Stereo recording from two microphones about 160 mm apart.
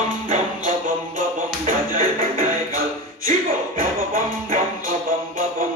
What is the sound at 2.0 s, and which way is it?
Music, 60° right (ahead or behind).